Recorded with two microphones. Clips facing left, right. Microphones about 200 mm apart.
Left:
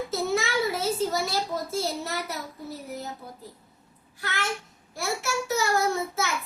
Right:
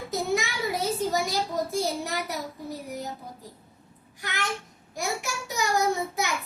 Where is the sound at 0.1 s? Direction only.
15° right (ahead or behind).